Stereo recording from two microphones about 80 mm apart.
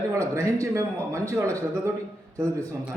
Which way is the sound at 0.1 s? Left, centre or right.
Right.